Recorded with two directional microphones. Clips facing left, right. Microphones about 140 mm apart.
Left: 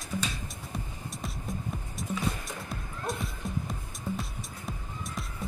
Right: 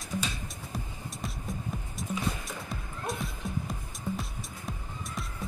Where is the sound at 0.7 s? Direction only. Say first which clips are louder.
Even; centre (ahead or behind).